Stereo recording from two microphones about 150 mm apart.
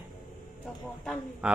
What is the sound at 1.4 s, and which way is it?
Speech, 10° right (ahead or behind).